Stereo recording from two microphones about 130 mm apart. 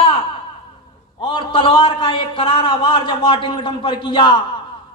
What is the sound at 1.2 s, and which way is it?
A man's voice, 40° left (ahead or behind).